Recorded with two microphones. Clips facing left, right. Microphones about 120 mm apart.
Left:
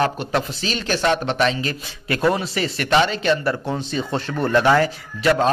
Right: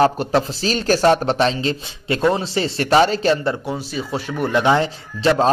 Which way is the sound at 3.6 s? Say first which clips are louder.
Left 1 dB; 10° right (ahead or behind).